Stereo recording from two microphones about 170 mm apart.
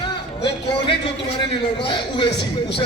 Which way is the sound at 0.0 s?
30° left (ahead or behind).